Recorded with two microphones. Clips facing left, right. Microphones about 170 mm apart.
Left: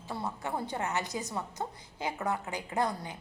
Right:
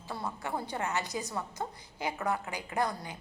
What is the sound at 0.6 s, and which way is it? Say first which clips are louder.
A woman's voice: left 1 dB; 20° left (ahead or behind).